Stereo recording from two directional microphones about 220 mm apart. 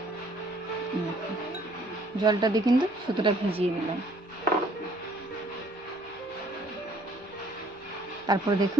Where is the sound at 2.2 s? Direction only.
20° right (ahead or behind).